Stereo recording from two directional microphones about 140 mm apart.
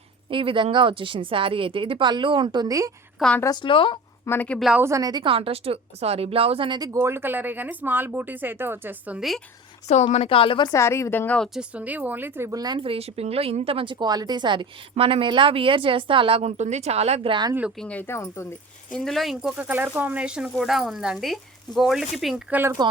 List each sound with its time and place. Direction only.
0.3 s speech: 40° right (ahead or behind)
3.2 s a woman's voice: 5° left (ahead or behind)
3.4 s a woman's voice: 30° left (ahead or behind)
4.3 s speech: 10° left (ahead or behind)
4.8 s speech: 20° right (ahead or behind)
9.9 s a woman's voice: 55° left (ahead or behind)
10.7 s speech: 20° left (ahead or behind)
11.5 s speech: 10° right (ahead or behind); by 17.3 s 50° right (ahead or behind)
17.7 s speech: 10° left (ahead or behind)
22.8 s speech: 30° right (ahead or behind)